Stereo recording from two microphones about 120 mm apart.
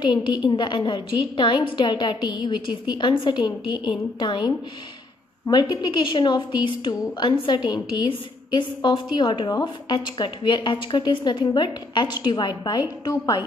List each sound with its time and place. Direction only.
0.0 s a woman's voice: 35° left (ahead or behind)